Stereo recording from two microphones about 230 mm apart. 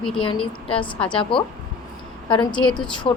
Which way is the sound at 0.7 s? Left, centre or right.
Left.